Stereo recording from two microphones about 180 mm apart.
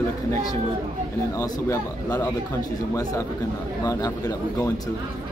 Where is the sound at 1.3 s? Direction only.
20° left (ahead or behind).